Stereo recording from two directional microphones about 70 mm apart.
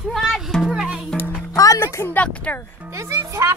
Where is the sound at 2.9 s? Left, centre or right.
Right.